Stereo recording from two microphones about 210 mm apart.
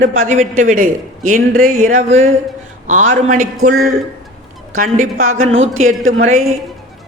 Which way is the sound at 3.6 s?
45° right (ahead or behind).